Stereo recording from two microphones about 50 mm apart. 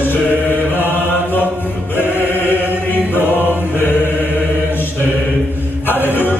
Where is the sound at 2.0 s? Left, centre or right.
Left.